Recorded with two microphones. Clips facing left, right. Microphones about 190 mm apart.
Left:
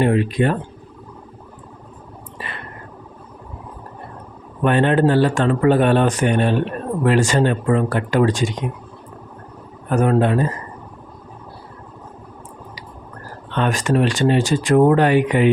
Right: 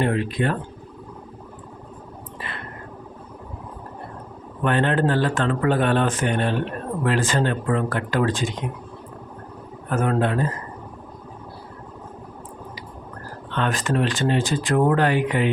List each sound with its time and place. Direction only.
0.0 s speech: 15° left (ahead or behind)
4.6 s speech: 15° left (ahead or behind)
9.9 s speech: 15° left (ahead or behind)
13.6 s speech: 15° left (ahead or behind)